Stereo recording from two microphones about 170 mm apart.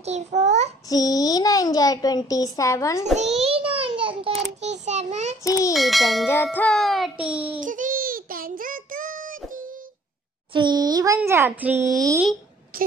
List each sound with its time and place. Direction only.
0.0 s a child's voice: 40° right (ahead or behind)
0.8 s a child's voice: 20° left (ahead or behind)
3.2 s a sound: 40° right (ahead or behind)
5.4 s a child's voice: 20° left (ahead or behind)
5.7 s music: centre (ahead or behind)
6.2 s music: 10° left (ahead or behind); by 7.6 s 5° right (ahead or behind)
7.6 s child singing: 50° right (ahead or behind)
10.5 s a child's voice: 25° right (ahead or behind)
12.7 s speech: 55° right (ahead or behind)